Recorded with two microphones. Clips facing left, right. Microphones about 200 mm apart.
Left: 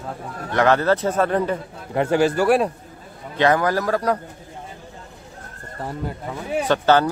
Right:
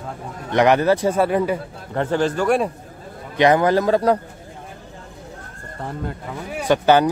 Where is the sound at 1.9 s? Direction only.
10° left (ahead or behind).